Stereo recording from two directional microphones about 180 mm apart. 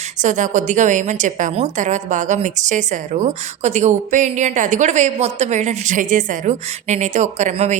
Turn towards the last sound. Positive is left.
turn(degrees=-40)  # may be behind; listen again after turning